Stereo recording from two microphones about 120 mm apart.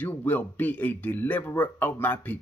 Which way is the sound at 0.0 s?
15° left (ahead or behind).